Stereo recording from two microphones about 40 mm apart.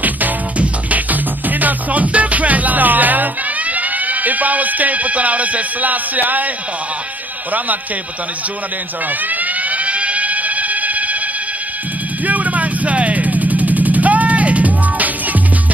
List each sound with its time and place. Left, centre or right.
0.0 s music: right
9.3 s alarm: right
12.3 s vehicle: right